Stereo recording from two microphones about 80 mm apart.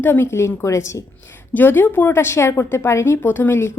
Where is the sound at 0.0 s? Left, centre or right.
Left.